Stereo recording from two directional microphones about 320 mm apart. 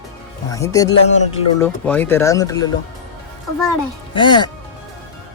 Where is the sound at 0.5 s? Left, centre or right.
Centre.